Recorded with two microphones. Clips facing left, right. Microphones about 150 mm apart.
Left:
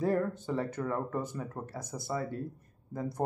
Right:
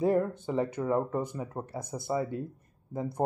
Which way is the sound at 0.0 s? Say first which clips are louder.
Right 3 dB; 15° right (ahead or behind).